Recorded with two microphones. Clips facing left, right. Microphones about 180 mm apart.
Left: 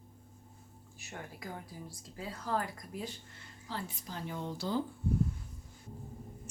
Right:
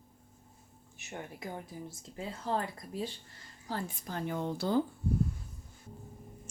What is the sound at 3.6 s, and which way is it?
A woman's voice, 50° right (ahead or behind).